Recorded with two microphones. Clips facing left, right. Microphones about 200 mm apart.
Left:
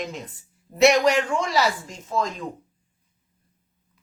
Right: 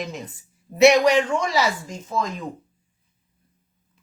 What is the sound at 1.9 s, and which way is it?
Speech, centre (ahead or behind).